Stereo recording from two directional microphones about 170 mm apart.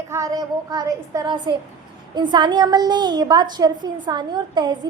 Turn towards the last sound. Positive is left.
turn(degrees=-25)  # may be behind; listen again after turning